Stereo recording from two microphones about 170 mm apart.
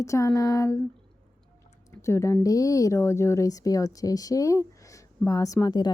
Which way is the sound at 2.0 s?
15° left (ahead or behind).